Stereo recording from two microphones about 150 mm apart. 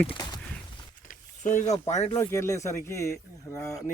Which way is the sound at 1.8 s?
45° left (ahead or behind).